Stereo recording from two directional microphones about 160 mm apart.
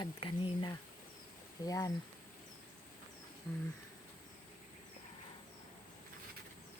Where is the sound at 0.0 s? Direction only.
30° left (ahead or behind).